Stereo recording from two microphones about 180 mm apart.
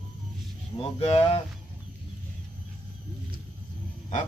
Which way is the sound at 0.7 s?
30° left (ahead or behind).